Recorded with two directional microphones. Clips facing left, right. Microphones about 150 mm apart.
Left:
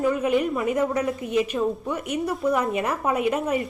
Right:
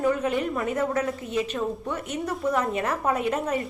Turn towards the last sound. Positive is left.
turn(degrees=10)  # may be behind; listen again after turning